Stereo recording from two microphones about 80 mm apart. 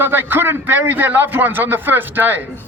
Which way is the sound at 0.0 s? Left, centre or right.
Right.